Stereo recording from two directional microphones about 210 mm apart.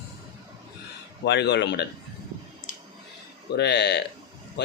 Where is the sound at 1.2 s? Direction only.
55° left (ahead or behind).